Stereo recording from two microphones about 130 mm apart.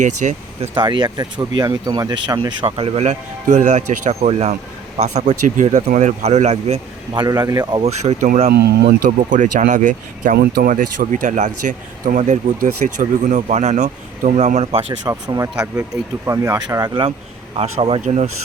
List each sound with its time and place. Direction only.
0.0 s speech: 70° right (ahead or behind)
0.7 s speech: 35° right (ahead or behind)
2.6 s speech: 50° right (ahead or behind)
7.1 s speech: 35° right (ahead or behind)
7.8 s speech: 55° right (ahead or behind)
9.0 s speech: 85° right; by 14.8 s 50° right (ahead or behind)
15.0 s speech: 25° right (ahead or behind)
17.6 s speech: 50° right (ahead or behind)
18.0 s speech: 65° right (ahead or behind)